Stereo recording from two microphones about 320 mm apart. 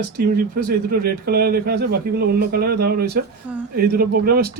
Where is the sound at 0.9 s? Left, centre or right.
Right.